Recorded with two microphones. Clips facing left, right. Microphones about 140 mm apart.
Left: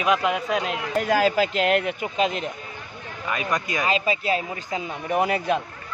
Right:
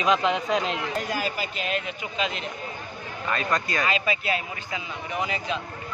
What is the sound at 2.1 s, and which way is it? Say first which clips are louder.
Speech: left 5 dB; 45° left (ahead or behind).